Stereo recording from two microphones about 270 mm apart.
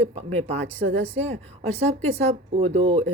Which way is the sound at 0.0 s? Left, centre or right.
Right.